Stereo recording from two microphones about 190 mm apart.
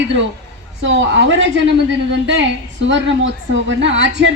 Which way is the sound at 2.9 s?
75° right (ahead or behind).